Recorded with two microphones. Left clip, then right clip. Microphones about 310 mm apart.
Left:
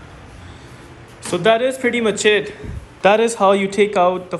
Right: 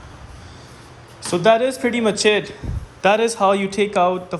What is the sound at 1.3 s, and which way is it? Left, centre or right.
Speech, centre.